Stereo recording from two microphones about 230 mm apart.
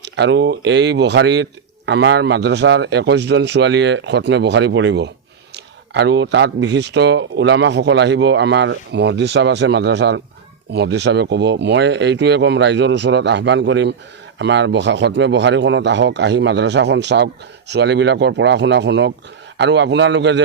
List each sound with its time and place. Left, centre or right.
0.0 s speech: right